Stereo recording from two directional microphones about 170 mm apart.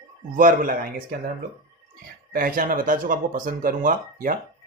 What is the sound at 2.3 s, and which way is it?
A man's voice, 55° right (ahead or behind).